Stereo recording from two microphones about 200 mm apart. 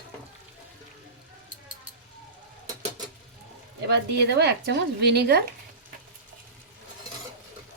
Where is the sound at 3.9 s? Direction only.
60° right (ahead or behind).